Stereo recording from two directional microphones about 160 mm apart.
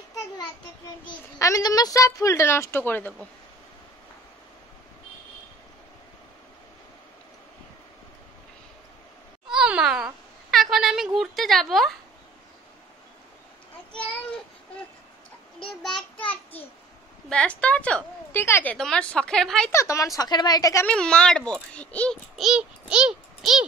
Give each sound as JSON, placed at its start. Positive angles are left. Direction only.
{"t": 1.4, "sound": "a woman's voice", "side_deg": 20}
{"t": 9.5, "sound": "cat", "side_deg": -5}
{"t": 15.6, "sound": "a child's voice", "side_deg": 5}
{"t": 17.3, "sound": "a woman's voice", "side_deg": 5}
{"t": 19.7, "sound": "a woman's voice", "side_deg": 20}
{"t": 20.8, "sound": "a child's voice", "side_deg": 5}